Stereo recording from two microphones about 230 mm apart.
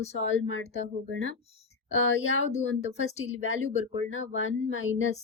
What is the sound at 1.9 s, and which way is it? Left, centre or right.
Speech, left.